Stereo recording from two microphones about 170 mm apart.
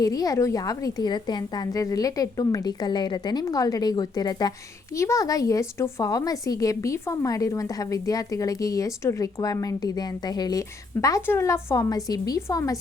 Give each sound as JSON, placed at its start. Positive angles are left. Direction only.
{"t": 0.0, "sound": "a woman's voice", "side_deg": 20}